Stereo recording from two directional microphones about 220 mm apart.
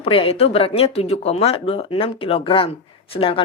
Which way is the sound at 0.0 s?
25° left (ahead or behind).